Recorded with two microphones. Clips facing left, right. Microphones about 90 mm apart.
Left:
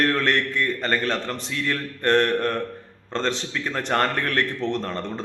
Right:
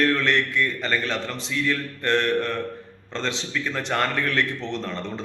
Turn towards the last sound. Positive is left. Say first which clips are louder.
# left 2 dB
turn(degrees=45)  # may be behind; listen again after turning